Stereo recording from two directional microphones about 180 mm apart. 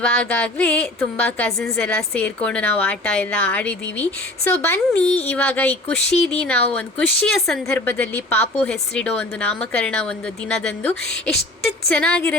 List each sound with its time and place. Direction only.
0.0 s a woman's voice: 10° left (ahead or behind)
5.0 s speech: 35° left (ahead or behind)
5.3 s a woman's voice: 10° left (ahead or behind)